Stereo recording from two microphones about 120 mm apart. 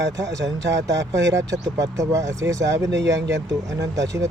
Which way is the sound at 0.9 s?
25° right (ahead or behind).